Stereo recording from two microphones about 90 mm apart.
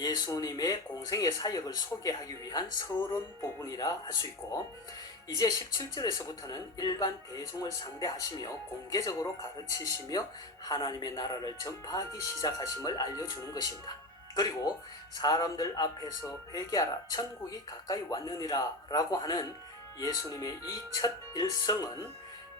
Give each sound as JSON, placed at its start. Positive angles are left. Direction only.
{"t": 0.3, "sound": "speech", "side_deg": 40}
{"t": 10.7, "sound": "a man's voice", "side_deg": 65}
{"t": 11.1, "sound": "speech", "side_deg": 50}